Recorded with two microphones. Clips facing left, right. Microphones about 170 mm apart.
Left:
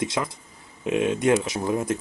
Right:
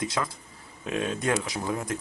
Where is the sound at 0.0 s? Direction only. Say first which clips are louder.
Left 3 dB; 20° left (ahead or behind).